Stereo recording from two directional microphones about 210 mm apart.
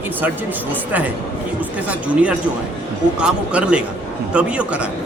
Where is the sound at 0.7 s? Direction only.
10° right (ahead or behind).